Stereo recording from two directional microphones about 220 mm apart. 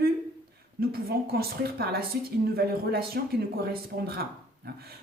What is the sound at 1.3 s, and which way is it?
Speech, 45° right (ahead or behind).